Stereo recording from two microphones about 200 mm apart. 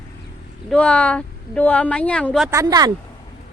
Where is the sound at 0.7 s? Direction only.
5° left (ahead or behind).